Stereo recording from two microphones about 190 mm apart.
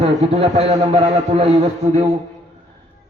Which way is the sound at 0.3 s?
30° right (ahead or behind).